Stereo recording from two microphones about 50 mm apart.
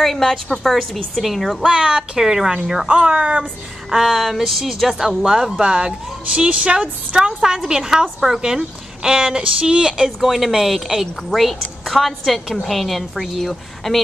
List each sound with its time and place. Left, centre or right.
0.0 s a woman's voice: centre
1.7 s speech: right
2.0 s speech: centre
3.9 s speech: centre
10.2 s a woman's voice: centre